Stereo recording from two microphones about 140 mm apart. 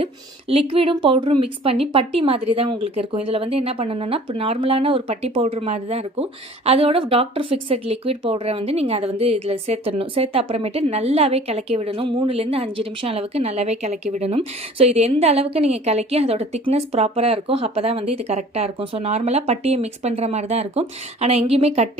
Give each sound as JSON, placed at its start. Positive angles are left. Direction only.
{"t": 0.0, "sound": "speech", "side_deg": -45}